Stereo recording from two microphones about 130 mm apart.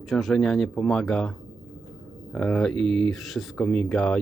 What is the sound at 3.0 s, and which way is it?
Speech, centre (ahead or behind).